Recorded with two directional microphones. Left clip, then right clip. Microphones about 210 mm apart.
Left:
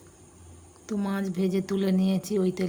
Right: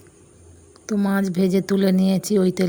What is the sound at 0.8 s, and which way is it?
Speech, 25° right (ahead or behind).